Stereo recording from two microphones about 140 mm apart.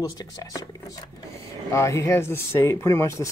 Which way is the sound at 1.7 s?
20° left (ahead or behind).